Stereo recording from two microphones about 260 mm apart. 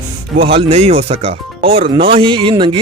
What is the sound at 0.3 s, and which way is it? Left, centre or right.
Speech, right.